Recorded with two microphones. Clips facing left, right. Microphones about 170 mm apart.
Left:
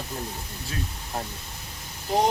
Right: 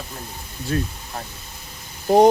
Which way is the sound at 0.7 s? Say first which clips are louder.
Right 11 dB; 50° right (ahead or behind).